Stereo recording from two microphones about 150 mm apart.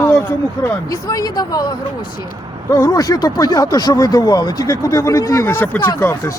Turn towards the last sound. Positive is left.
turn(degrees=15)  # may be behind; listen again after turning